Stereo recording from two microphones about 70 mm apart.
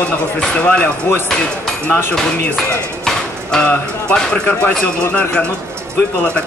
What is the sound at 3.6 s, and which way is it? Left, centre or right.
Speech, centre.